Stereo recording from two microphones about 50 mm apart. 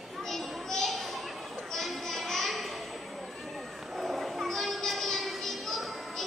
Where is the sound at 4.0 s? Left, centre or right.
Centre.